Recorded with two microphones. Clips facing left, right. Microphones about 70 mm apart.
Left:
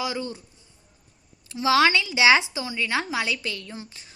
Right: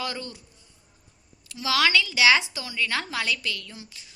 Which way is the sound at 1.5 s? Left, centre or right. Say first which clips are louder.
Left 5 dB; left.